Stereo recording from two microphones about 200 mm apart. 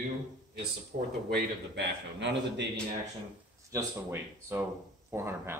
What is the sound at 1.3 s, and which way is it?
A man's voice, 60° right (ahead or behind).